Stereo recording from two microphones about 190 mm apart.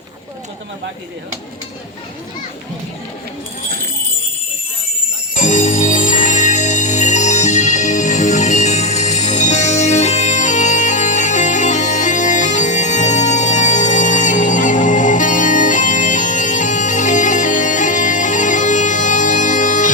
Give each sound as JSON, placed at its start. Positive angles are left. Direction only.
{"t": 5.4, "sound": "music", "side_deg": 40}